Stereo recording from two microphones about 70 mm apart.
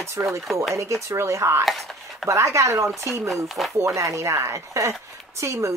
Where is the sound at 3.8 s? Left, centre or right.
Right.